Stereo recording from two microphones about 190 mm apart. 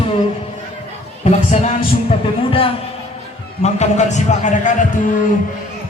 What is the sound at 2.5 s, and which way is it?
Music, 30° left (ahead or behind).